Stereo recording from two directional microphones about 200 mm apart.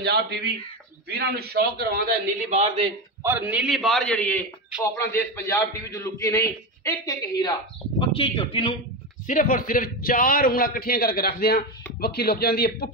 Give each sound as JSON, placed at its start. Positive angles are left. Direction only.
{"t": 0.0, "sound": "a man's voice", "side_deg": -50}
{"t": 2.5, "sound": "a man's voice", "side_deg": -30}
{"t": 3.2, "sound": "a man's voice", "side_deg": -10}
{"t": 9.3, "sound": "a man's voice", "side_deg": 45}